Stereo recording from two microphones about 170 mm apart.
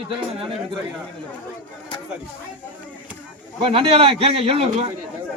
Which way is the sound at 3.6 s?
35° right (ahead or behind).